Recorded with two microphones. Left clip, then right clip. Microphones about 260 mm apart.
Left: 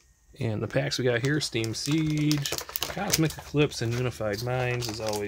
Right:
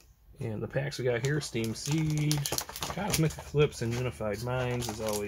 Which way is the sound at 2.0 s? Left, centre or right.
Centre.